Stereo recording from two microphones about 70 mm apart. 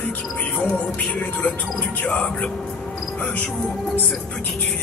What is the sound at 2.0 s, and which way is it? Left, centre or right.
Speech, centre.